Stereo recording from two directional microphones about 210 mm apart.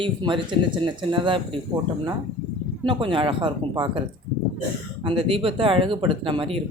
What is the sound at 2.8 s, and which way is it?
Speech, 25° right (ahead or behind).